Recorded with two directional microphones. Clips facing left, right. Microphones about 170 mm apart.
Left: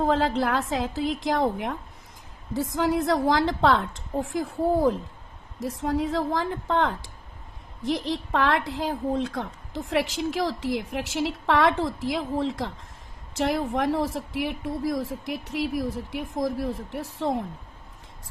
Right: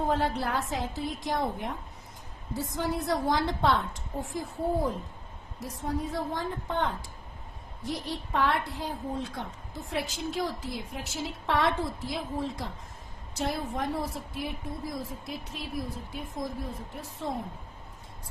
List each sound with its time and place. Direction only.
0.1 s a woman's voice: 90° left